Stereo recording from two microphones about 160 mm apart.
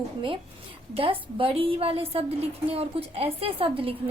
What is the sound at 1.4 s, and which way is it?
A woman's voice, 35° right (ahead or behind).